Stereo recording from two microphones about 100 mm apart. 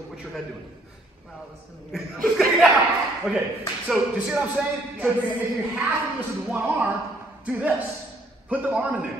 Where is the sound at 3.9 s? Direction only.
10° right (ahead or behind).